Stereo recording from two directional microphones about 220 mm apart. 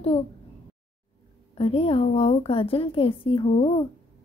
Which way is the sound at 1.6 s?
25° left (ahead or behind).